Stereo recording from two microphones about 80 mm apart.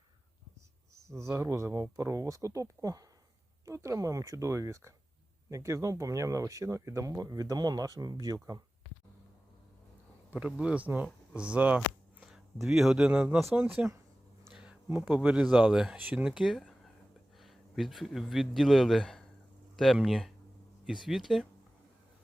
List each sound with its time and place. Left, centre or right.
0.9 s speech: right
10.3 s speech: centre
12.3 s speech: centre
14.5 s a sound: centre
15.0 s speech: centre
16.0 s speech: right
16.2 s a man's voice: centre